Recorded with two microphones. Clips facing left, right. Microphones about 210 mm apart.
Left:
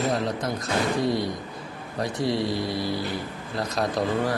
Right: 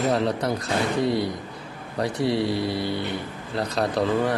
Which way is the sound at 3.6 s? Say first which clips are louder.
Right 2 dB; 30° right (ahead or behind).